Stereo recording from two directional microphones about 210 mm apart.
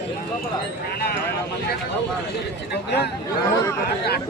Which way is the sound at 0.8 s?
50° left (ahead or behind).